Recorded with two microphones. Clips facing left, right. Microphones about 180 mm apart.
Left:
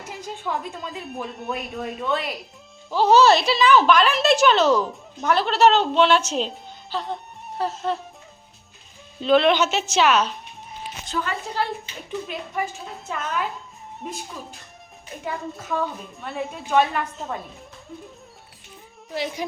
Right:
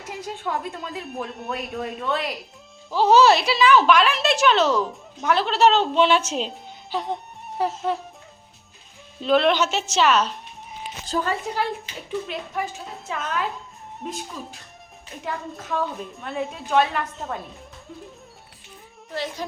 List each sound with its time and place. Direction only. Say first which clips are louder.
0.1 s a woman's voice: right 1 dB; centre (ahead or behind)
6.9 s speech: right 2 dB; 20° right (ahead or behind)
7.8 s a woman's voice: right 1 dB; centre (ahead or behind)
9.1 s a woman's voice: left 1 dB; centre (ahead or behind)
11.0 s a woman's voice: right 3 dB; 35° right (ahead or behind)
12.2 s a woman's voice: even; centre (ahead or behind)
19.1 s speech: left 2 dB; 15° left (ahead or behind)